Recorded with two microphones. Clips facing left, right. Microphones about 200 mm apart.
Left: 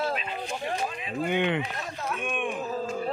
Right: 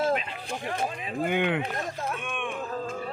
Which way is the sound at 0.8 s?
40° right (ahead or behind).